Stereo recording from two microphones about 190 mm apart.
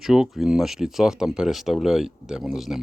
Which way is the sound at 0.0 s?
Centre (ahead or behind).